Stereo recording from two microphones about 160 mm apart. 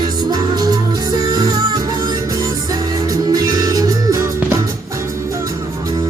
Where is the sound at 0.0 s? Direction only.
25° right (ahead or behind).